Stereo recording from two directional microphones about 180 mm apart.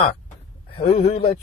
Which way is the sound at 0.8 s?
35° left (ahead or behind).